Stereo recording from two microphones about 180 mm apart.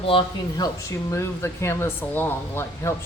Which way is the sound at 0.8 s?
15° left (ahead or behind).